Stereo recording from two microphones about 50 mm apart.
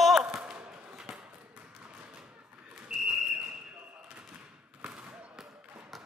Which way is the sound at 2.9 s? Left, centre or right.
Centre.